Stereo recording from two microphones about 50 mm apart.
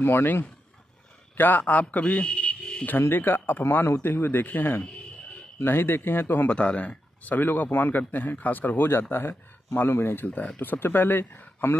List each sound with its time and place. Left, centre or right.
0.0 s a man's voice: left
2.9 s speech: left
6.5 s speech: left
10.2 s speech: left